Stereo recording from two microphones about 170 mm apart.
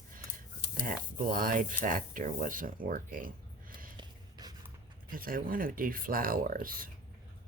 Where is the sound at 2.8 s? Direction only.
55° right (ahead or behind).